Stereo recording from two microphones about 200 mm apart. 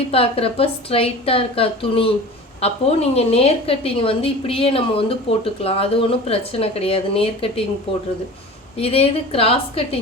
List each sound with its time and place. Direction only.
0.1 s a woman's voice: 30° left (ahead or behind)
8.8 s a woman's voice: 30° left (ahead or behind)